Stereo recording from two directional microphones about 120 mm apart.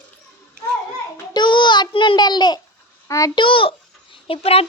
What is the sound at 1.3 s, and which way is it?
A child's voice, 40° left (ahead or behind).